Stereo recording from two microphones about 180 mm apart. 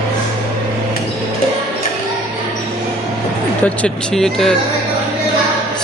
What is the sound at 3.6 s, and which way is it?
Speech, 5° left (ahead or behind).